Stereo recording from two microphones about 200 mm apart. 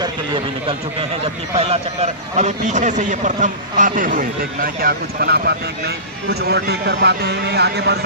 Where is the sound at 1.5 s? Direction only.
30° right (ahead or behind).